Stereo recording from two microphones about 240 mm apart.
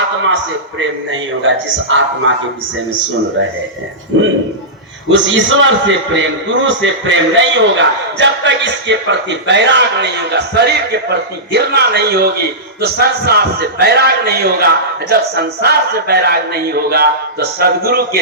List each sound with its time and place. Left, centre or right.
0.8 s a man's voice: right
4.1 s a man's voice: right